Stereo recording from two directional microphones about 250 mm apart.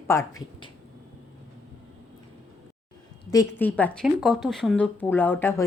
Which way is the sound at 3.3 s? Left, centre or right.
Centre.